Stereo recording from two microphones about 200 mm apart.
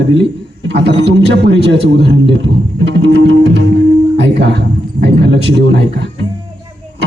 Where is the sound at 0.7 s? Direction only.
60° right (ahead or behind).